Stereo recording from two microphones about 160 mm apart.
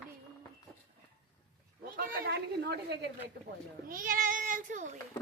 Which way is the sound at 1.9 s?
65° right (ahead or behind).